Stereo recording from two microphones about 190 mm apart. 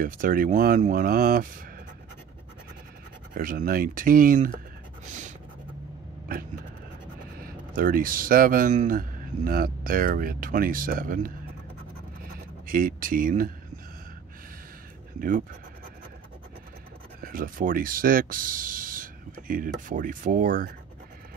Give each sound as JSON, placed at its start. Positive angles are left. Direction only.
{"t": 0.0, "sound": "speech", "side_deg": -45}
{"t": 3.3, "sound": "speech", "side_deg": -45}
{"t": 5.0, "sound": "a sound", "side_deg": -40}
{"t": 7.3, "sound": "speech", "side_deg": -50}
{"t": 12.6, "sound": "speech", "side_deg": -50}
{"t": 15.1, "sound": "speech", "side_deg": -45}
{"t": 17.2, "sound": "speech", "side_deg": -45}